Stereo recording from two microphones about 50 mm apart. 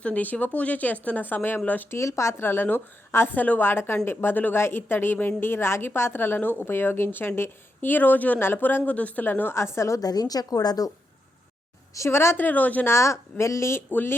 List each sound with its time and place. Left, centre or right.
0.0 s speech: left
1.9 s speech: left
2.4 s a woman's voice: left
3.3 s speech: left
3.7 s a woman's voice: left
8.9 s speech: left
9.2 s speech: left
9.6 s a woman's voice: left
11.9 s a woman's voice: left
12.4 s speech: left
12.8 s speech: left
13.9 s a woman's voice: left